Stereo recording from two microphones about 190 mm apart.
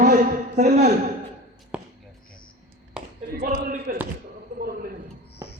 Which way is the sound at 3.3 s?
50° right (ahead or behind).